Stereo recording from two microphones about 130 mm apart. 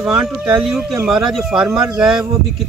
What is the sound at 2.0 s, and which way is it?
Speech, 5° right (ahead or behind).